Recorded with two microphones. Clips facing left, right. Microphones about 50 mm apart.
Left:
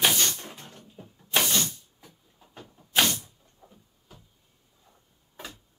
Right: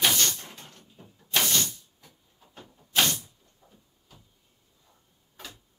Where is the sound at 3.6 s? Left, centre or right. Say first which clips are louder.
Left 4 dB; left.